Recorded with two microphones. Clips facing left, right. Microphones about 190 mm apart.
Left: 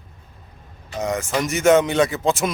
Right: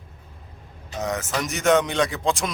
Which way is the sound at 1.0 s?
Centre (ahead or behind).